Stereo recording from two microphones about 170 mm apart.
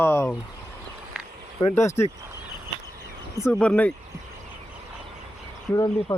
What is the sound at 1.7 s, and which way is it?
Speech, 15° left (ahead or behind).